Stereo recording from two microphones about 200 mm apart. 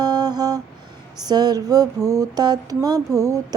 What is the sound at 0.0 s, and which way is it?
Music, 20° right (ahead or behind).